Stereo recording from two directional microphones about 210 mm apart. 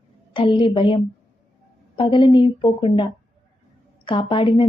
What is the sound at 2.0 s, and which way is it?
A woman's voice, 20° left (ahead or behind).